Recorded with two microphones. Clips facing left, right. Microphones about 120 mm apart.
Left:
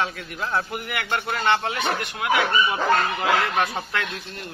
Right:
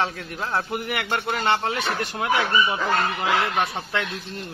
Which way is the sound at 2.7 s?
25° left (ahead or behind).